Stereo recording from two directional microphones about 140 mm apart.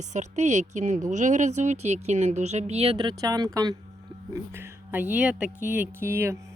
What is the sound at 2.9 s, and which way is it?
Speech, 30° right (ahead or behind).